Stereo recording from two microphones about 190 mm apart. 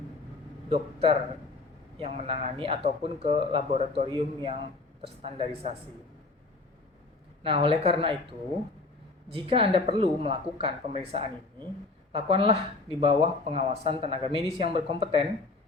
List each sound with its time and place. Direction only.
0.7 s speech: 30° right (ahead or behind)
7.4 s speech: 30° right (ahead or behind)
12.1 s speech: 30° right (ahead or behind)